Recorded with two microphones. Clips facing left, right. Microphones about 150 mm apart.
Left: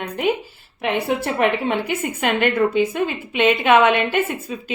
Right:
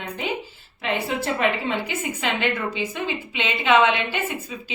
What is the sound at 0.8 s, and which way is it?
A woman's voice, 60° left (ahead or behind).